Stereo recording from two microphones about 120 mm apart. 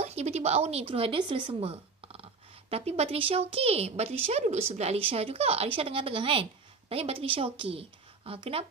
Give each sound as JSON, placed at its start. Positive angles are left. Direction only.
{"t": 0.0, "sound": "speech", "side_deg": -65}